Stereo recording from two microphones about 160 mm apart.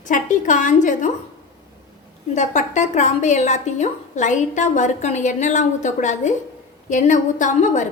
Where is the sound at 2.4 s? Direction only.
50° left (ahead or behind).